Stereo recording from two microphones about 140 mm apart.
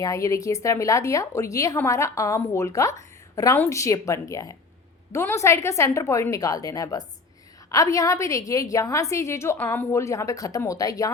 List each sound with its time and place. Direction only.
0.0 s a woman's voice: 20° left (ahead or behind)